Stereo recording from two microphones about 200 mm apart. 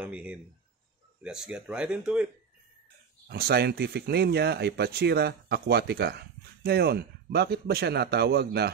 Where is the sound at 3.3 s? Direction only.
50° right (ahead or behind).